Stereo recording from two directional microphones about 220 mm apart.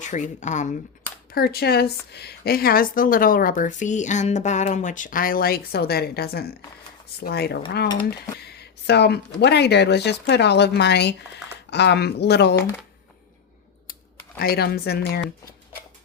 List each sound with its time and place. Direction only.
0.0 s a woman's voice: 35° left (ahead or behind)
1.3 s a woman's voice: 45° left (ahead or behind)
14.3 s speech: 45° left (ahead or behind)